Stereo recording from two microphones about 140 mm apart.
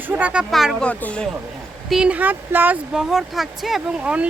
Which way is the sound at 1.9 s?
5° right (ahead or behind).